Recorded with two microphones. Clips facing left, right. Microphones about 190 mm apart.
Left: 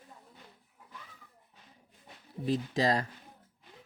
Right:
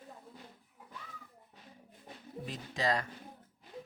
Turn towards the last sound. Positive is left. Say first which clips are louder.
# left 4 dB
turn(degrees=35)  # may be behind; listen again after turning